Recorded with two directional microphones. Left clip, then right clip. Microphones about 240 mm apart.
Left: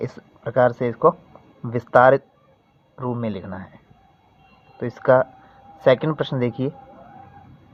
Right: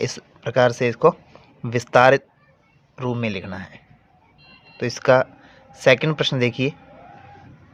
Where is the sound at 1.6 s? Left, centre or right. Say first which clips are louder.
Even; right.